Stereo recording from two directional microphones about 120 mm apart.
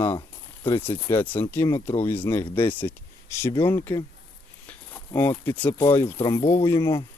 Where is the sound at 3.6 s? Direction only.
20° left (ahead or behind).